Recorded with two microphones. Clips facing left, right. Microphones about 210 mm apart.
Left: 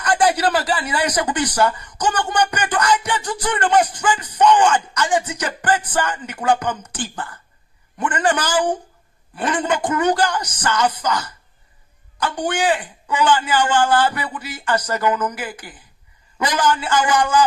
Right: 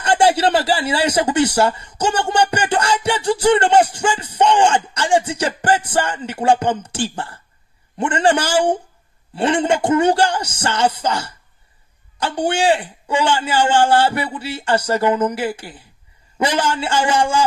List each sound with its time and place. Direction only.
0.0 s speech: 25° right (ahead or behind)